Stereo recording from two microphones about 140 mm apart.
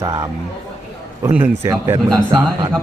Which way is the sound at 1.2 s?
10° right (ahead or behind).